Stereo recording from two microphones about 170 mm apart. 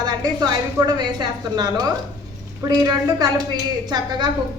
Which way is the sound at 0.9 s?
25° right (ahead or behind).